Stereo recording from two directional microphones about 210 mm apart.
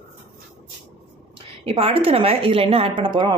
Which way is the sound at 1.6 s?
25° right (ahead or behind).